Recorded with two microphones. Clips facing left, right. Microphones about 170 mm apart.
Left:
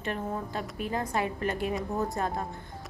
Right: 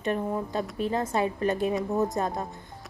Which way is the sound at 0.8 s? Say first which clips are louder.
Right 3 dB; 25° right (ahead or behind).